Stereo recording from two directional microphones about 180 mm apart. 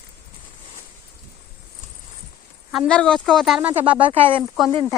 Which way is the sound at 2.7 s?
5° left (ahead or behind).